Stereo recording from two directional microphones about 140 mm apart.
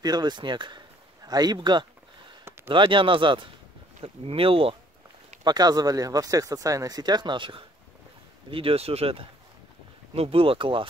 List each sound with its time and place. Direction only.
0.0 s speech: 30° right (ahead or behind)
5.4 s speech: 30° right (ahead or behind)